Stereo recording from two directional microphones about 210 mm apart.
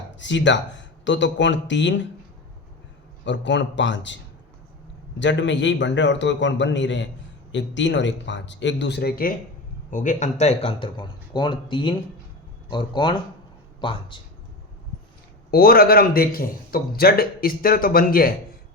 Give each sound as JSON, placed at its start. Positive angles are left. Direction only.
{"t": 0.2, "sound": "a man's voice", "side_deg": 60}
{"t": 3.2, "sound": "a man's voice", "side_deg": 60}
{"t": 5.2, "sound": "a man's voice", "side_deg": 60}
{"t": 15.4, "sound": "a man's voice", "side_deg": 45}